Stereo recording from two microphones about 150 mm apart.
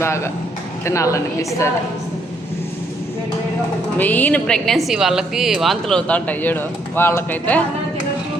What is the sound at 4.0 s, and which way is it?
A woman's voice, 10° left (ahead or behind).